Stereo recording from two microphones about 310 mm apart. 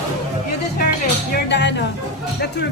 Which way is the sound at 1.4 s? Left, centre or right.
Left.